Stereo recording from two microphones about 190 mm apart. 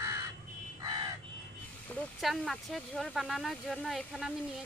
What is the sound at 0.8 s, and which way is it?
Crow, 20° right (ahead or behind).